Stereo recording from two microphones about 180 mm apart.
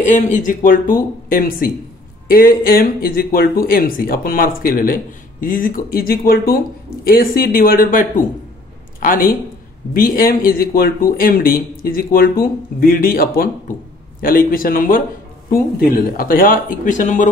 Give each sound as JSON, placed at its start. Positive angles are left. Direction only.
{"t": 0.0, "sound": "speech", "side_deg": 45}